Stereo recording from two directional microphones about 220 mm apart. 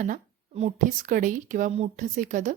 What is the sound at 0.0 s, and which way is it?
A woman's voice, 35° right (ahead or behind).